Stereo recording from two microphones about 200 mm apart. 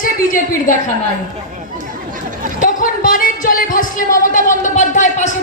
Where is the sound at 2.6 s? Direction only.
40° left (ahead or behind).